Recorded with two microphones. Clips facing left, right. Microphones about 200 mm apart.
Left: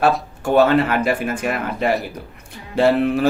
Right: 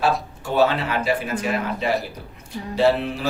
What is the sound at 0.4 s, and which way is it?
A woman's voice, 55° left (ahead or behind).